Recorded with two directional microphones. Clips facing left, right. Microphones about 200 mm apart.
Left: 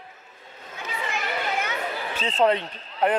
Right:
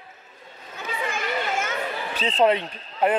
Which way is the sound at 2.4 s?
10° right (ahead or behind).